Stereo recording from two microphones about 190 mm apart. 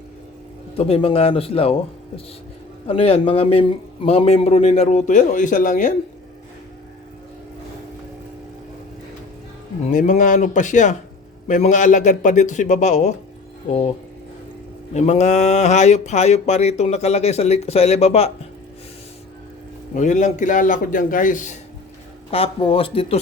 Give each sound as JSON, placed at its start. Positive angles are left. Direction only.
{"t": 0.8, "sound": "speech", "side_deg": 30}
{"t": 9.8, "sound": "speech", "side_deg": 40}
{"t": 14.9, "sound": "speech", "side_deg": 35}
{"t": 19.9, "sound": "a man's voice", "side_deg": 40}
{"t": 22.3, "sound": "speech", "side_deg": 30}